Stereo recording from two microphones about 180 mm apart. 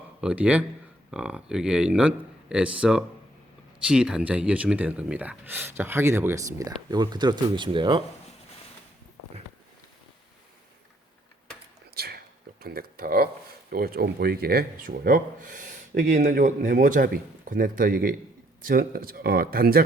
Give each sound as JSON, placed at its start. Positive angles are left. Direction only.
{"t": 0.2, "sound": "speech", "side_deg": -5}
{"t": 11.9, "sound": "a sound", "side_deg": -60}
{"t": 13.7, "sound": "speech", "side_deg": -60}